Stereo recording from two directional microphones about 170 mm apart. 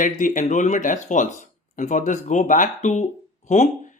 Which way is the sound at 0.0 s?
50° left (ahead or behind).